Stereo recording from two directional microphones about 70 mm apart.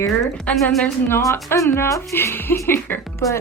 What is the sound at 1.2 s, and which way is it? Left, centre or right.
A woman's voice, left.